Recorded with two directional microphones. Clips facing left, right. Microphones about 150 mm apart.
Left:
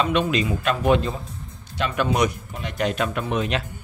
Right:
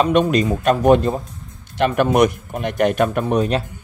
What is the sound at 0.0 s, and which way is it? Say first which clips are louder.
Speech: right 6 dB; 45° right (ahead or behind).